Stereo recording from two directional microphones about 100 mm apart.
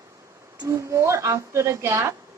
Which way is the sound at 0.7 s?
30° right (ahead or behind).